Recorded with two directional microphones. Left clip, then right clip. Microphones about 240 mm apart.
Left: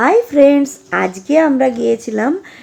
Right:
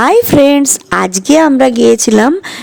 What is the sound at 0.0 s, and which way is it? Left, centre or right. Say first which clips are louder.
A woman's voice: right 3 dB; right.